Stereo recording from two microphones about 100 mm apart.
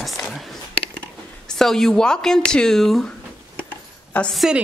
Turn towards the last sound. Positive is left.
turn(degrees=0)  # may be behind; listen again after turning